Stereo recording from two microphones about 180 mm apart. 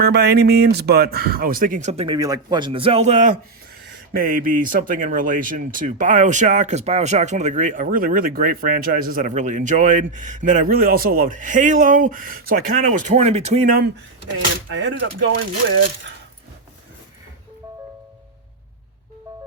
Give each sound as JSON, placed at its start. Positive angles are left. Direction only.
{"t": 0.0, "sound": "speech", "side_deg": -65}
{"t": 2.1, "sound": "a man's voice", "side_deg": -20}
{"t": 14.7, "sound": "speech", "side_deg": -90}